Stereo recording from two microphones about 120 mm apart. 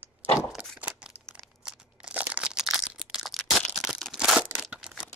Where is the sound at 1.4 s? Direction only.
5° right (ahead or behind).